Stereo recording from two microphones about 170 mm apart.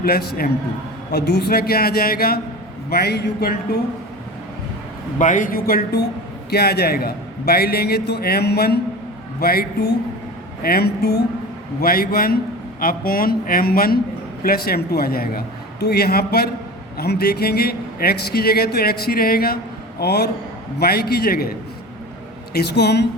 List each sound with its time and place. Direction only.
0.0 s a man's voice: 65° left (ahead or behind)
1.1 s a man's voice: 75° left (ahead or behind)
5.2 s a man's voice: 50° left (ahead or behind)
22.5 s a man's voice: 75° left (ahead or behind)